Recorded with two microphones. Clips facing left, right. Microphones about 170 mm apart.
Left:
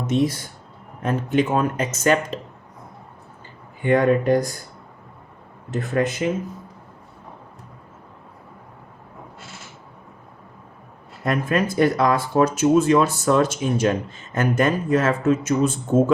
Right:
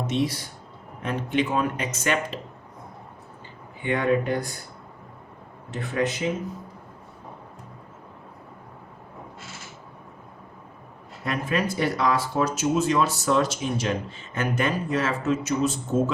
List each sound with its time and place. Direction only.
0.1 s speech: 45° left (ahead or behind)
3.8 s speech: 45° left (ahead or behind)
5.7 s speech: 50° left (ahead or behind)
11.3 s speech: 50° left (ahead or behind)